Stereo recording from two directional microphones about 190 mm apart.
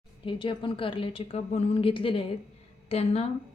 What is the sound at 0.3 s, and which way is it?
A woman's voice, 25° left (ahead or behind).